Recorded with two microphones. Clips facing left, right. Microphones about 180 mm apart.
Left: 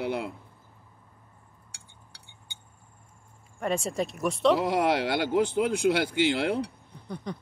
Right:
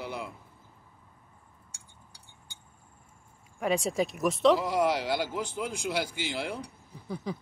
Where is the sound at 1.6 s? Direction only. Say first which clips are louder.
Left 1 dB; 70° left (ahead or behind).